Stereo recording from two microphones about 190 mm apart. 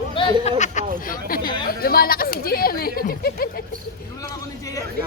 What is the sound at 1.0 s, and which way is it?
Speech, 50° left (ahead or behind).